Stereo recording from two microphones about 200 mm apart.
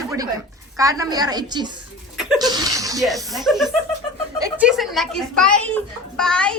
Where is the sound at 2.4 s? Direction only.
20° right (ahead or behind).